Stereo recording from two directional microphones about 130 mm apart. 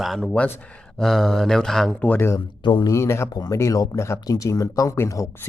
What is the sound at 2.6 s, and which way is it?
Speech, 35° left (ahead or behind).